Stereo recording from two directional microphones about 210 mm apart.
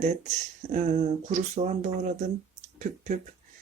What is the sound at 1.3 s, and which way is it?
Speech, 35° right (ahead or behind).